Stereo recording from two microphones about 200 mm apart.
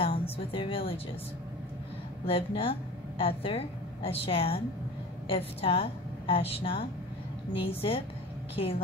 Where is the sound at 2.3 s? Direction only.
30° left (ahead or behind).